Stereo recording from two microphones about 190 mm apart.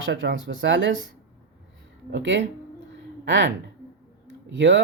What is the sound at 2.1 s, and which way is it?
Speech, 70° right (ahead or behind).